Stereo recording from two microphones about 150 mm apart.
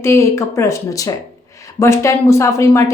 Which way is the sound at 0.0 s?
20° left (ahead or behind).